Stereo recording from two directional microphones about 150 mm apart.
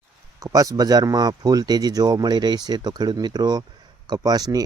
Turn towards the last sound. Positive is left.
turn(degrees=-25)  # may be behind; listen again after turning